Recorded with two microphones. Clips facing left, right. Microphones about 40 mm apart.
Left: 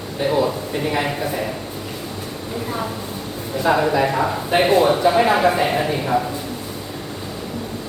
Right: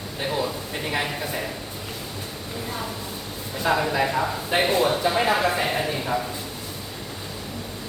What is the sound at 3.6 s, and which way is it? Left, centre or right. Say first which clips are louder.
Speech: left 5 dB; centre.